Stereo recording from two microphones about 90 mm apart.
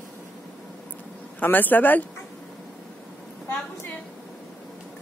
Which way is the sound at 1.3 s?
20° left (ahead or behind).